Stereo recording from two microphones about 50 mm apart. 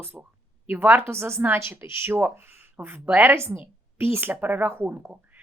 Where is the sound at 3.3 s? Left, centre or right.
Right.